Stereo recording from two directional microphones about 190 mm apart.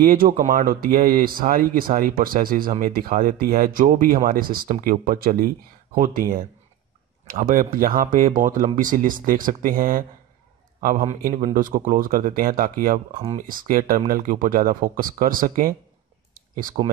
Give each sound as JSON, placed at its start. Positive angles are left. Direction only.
{"t": 0.0, "sound": "speech", "side_deg": -50}
{"t": 7.2, "sound": "speech", "side_deg": -45}